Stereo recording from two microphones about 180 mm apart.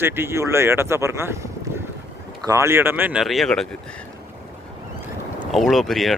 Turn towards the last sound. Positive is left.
turn(degrees=0)  # may be behind; listen again after turning